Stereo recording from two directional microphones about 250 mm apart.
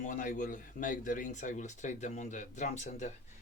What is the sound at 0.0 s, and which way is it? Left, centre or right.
Speech, left.